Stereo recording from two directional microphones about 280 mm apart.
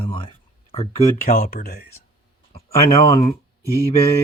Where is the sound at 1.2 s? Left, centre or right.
Left.